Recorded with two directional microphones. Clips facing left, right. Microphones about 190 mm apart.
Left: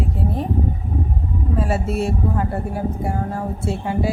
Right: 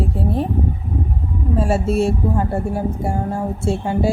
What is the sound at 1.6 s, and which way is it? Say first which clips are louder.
Speech: right 5 dB; 30° right (ahead or behind).